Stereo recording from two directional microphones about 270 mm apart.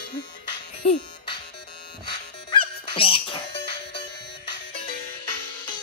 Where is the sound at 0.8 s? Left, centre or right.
Centre.